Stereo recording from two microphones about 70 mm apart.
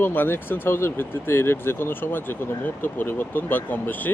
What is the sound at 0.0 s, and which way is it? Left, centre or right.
Speech, left.